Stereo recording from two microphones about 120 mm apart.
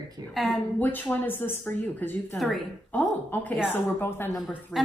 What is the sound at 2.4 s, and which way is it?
Speech, centre (ahead or behind).